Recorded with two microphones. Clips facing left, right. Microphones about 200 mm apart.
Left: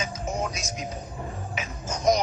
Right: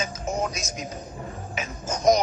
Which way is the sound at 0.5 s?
45° right (ahead or behind).